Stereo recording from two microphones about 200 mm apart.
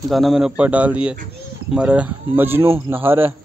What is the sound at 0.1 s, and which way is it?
Speech, centre (ahead or behind).